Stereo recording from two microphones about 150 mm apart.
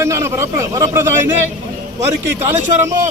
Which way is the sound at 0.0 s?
20° right (ahead or behind).